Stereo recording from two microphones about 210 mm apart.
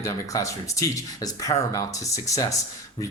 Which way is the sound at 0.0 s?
15° left (ahead or behind).